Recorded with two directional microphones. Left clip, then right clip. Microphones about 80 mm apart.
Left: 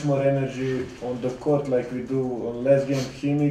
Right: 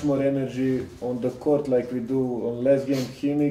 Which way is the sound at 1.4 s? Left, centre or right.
Left.